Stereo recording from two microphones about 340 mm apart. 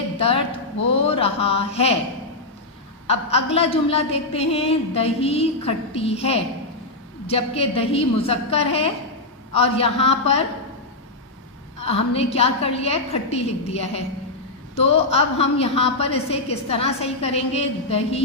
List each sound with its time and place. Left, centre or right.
0.2 s a woman's voice: centre
3.1 s a woman's voice: centre
11.8 s a woman's voice: centre